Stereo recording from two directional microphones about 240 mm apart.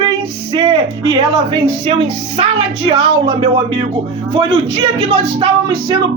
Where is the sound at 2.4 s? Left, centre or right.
Right.